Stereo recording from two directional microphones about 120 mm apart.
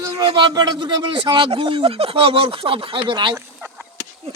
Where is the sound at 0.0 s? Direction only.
35° right (ahead or behind).